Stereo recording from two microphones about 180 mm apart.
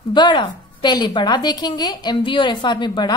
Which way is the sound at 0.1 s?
25° left (ahead or behind).